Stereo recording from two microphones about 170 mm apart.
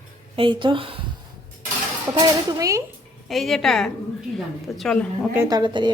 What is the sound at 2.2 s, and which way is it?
Speech, 20° right (ahead or behind).